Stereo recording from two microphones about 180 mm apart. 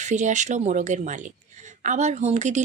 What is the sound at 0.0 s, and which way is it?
Speech, 40° right (ahead or behind).